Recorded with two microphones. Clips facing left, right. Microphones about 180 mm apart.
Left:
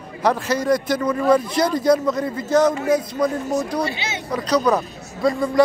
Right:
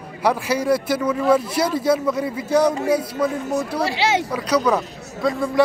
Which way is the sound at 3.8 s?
90° right.